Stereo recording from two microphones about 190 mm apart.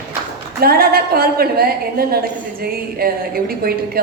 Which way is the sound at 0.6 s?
55° right (ahead or behind).